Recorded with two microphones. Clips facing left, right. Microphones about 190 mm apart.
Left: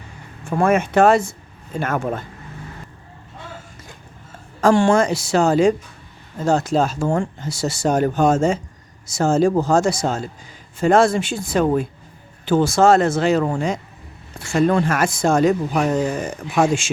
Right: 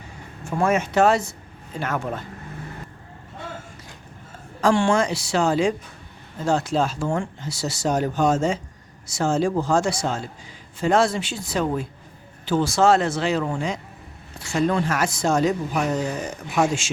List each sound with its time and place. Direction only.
0.5 s speech: 55° left (ahead or behind)
4.6 s speech: 40° left (ahead or behind)